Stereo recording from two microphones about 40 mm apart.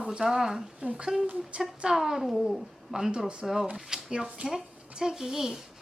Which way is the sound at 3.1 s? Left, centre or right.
Right.